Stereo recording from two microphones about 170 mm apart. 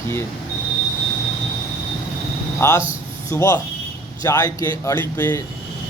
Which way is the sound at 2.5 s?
15° left (ahead or behind).